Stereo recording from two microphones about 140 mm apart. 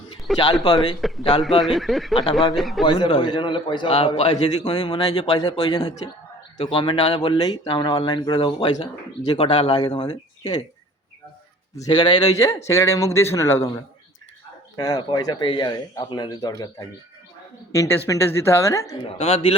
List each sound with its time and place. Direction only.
0.3 s speech: centre (ahead or behind)
0.6 s a man's voice: 30° left (ahead or behind)
1.6 s speech: centre (ahead or behind)
2.8 s a man's voice: 35° left (ahead or behind)
5.4 s speech: 30° left (ahead or behind)
6.6 s a man's voice: 40° left (ahead or behind)
11.7 s a man's voice: 30° left (ahead or behind)
12.4 s speech: 20° left (ahead or behind)
17.7 s speech: 20° left (ahead or behind)
19.2 s a man's voice: 45° left (ahead or behind)